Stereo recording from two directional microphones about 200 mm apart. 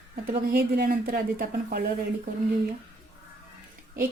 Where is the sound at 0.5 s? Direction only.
50° right (ahead or behind).